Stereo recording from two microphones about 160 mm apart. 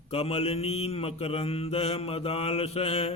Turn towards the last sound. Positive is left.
turn(degrees=40)  # may be behind; listen again after turning